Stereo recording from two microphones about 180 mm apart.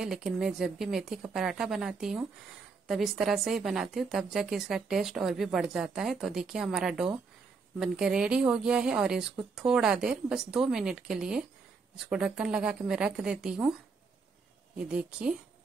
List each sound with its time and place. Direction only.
0.0 s a woman's voice: centre (ahead or behind)
14.8 s a woman's voice: 5° right (ahead or behind)